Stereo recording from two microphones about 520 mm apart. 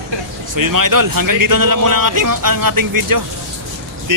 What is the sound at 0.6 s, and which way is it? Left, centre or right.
Speech, right.